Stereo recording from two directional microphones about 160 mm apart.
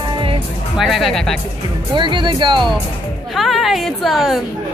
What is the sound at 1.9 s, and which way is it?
Speech, 30° right (ahead or behind).